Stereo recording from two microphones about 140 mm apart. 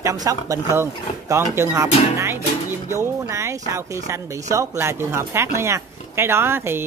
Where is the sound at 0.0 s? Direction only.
25° right (ahead or behind).